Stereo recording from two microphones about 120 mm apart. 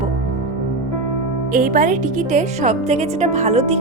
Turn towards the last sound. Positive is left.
turn(degrees=-65)  # may be behind; listen again after turning